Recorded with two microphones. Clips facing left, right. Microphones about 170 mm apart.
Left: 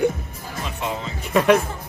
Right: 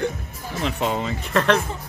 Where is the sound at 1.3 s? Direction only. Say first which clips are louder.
Left 3 dB; 10° left (ahead or behind).